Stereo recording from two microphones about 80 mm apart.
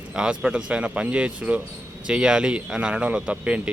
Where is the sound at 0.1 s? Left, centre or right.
Centre.